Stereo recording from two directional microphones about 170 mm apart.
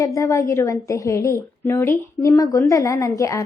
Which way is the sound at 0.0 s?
20° left (ahead or behind).